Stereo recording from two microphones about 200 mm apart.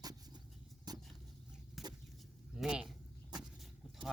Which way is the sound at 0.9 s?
20° right (ahead or behind).